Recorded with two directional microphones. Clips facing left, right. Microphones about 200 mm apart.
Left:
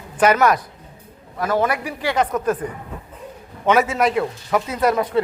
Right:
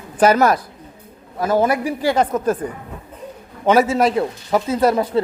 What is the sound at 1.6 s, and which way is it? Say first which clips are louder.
Speech: right 4 dB; 30° right (ahead or behind).